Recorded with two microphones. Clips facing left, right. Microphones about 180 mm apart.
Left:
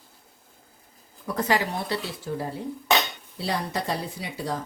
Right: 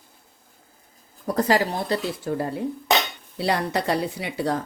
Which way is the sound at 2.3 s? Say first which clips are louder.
Right 4 dB; 60° right (ahead or behind).